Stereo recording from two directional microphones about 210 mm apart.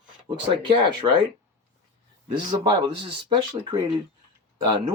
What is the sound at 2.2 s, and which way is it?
Speech, 20° right (ahead or behind).